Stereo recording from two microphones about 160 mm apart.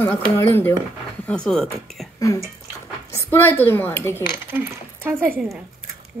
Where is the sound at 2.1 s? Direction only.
20° left (ahead or behind).